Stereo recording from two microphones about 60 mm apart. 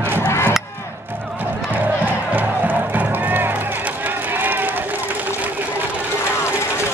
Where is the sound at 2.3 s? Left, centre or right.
Right.